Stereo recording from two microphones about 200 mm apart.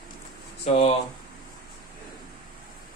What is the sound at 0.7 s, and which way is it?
Speech, 30° left (ahead or behind).